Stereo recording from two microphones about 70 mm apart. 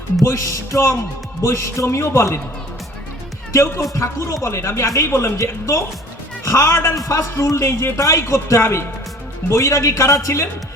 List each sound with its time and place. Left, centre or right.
0.2 s a man's voice: left
3.5 s a man's voice: left